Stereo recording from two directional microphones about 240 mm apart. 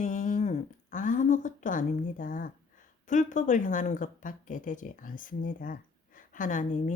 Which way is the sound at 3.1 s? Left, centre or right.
Left.